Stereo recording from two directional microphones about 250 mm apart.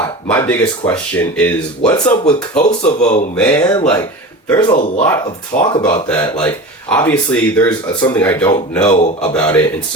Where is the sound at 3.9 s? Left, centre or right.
Centre.